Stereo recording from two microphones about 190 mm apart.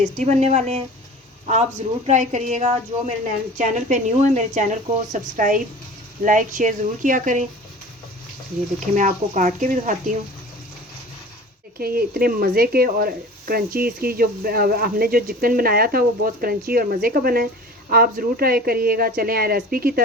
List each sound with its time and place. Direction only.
0.0 s a woman's voice: 35° right (ahead or behind)
2.0 s a woman's voice: 40° right (ahead or behind)
9.0 s a woman's voice: 40° right (ahead or behind)
11.8 s speech: 50° right (ahead or behind)